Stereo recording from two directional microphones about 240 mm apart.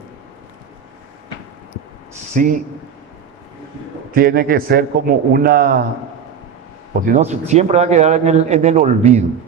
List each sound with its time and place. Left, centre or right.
2.3 s a man's voice: right
4.1 s a man's voice: right
7.0 s speech: right